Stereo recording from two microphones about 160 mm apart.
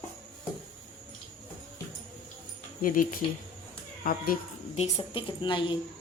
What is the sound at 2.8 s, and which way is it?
Speech, 60° left (ahead or behind).